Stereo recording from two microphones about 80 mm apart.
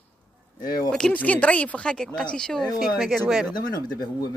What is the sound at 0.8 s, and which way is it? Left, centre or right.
Speech, centre.